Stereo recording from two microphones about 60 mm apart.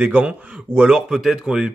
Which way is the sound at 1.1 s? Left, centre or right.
Centre.